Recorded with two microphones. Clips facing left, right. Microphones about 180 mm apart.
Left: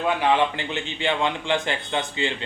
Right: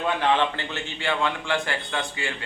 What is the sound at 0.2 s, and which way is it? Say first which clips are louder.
A man's voice: left 2 dB; 15° left (ahead or behind).